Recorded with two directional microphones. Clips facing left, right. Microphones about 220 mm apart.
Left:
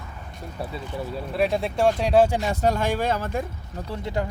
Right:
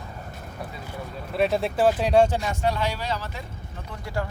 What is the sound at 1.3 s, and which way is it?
Speech, centre (ahead or behind).